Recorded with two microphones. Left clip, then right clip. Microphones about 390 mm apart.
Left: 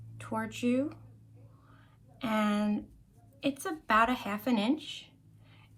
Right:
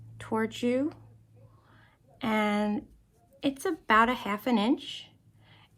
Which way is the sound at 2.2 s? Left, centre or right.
Right.